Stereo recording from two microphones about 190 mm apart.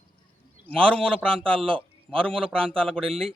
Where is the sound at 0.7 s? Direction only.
5° left (ahead or behind).